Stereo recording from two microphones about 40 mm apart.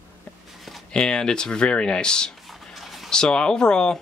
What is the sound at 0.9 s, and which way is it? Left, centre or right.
Speech, centre.